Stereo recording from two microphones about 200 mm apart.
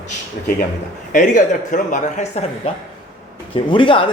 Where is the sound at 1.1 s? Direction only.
40° left (ahead or behind).